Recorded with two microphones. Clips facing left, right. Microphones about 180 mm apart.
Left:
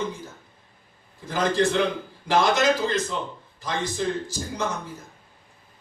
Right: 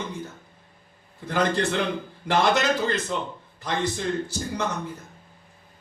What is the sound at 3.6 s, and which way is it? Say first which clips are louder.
A man's voice: even; 60° right (ahead or behind).